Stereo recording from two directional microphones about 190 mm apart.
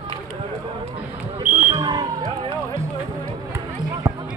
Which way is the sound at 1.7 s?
20° right (ahead or behind).